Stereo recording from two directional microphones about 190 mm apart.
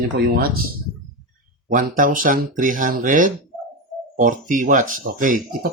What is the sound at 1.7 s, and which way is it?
Speech, 45° right (ahead or behind).